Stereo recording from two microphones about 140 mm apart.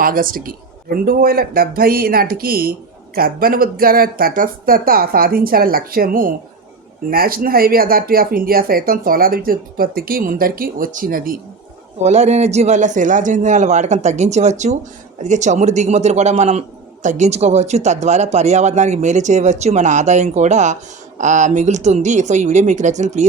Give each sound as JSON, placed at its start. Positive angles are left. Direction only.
{"t": 0.0, "sound": "speech", "side_deg": -90}
{"t": 12.0, "sound": "a man's voice", "side_deg": -55}